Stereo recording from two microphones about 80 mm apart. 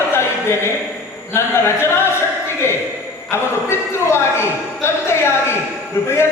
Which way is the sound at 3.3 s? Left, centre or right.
Left.